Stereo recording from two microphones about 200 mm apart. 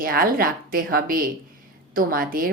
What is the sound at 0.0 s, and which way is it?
Speech, 45° right (ahead or behind).